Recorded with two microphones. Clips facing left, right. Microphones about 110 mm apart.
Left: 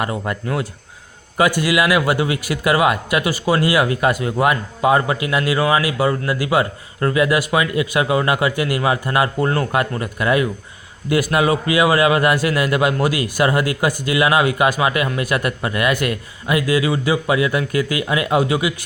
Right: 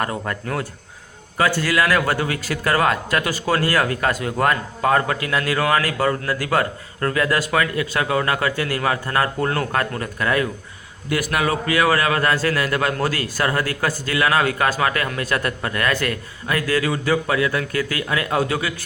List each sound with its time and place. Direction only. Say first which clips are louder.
0.0 s a man's voice: left 2 dB; 5° left (ahead or behind)
11.1 s a man's voice: left 5 dB; 25° left (ahead or behind)